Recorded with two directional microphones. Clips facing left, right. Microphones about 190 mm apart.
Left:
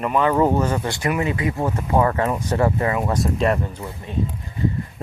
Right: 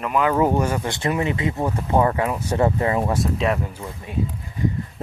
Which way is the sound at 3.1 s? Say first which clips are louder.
Left 1 dB; centre (ahead or behind).